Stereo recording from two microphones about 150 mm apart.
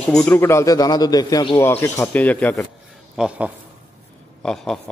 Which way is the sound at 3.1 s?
5° right (ahead or behind).